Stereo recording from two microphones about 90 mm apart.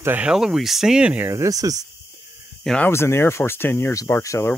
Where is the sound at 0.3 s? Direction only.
5° right (ahead or behind).